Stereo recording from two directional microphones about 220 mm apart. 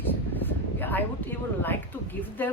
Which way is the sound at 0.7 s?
10° left (ahead or behind).